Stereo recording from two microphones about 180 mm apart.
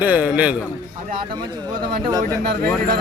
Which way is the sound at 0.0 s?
10° right (ahead or behind).